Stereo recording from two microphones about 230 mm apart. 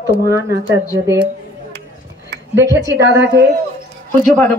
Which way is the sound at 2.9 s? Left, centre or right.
Right.